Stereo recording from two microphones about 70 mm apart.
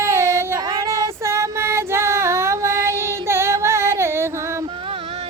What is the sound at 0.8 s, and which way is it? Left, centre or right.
Female singing, right.